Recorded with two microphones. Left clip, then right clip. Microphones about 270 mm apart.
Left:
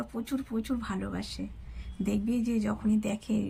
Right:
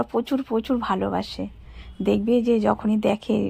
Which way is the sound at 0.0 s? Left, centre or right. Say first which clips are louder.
Right 12 dB; right.